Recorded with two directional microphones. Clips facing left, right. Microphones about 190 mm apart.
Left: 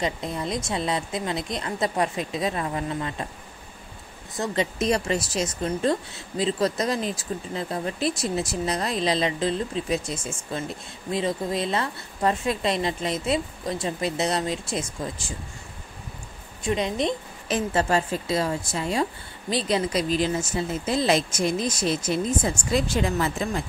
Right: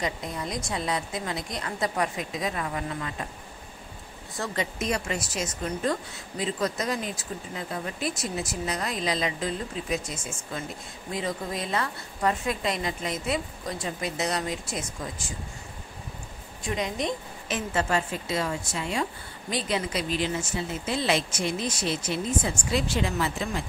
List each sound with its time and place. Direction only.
0.0 s a woman's voice: 25° left (ahead or behind)
4.4 s a woman's voice: 30° left (ahead or behind)
16.6 s a woman's voice: 25° left (ahead or behind); by 23.6 s 45° left (ahead or behind)